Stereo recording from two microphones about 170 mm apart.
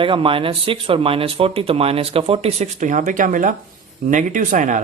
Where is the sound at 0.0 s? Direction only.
30° right (ahead or behind).